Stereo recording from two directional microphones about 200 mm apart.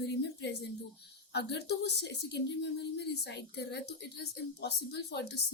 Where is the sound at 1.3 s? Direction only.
55° left (ahead or behind).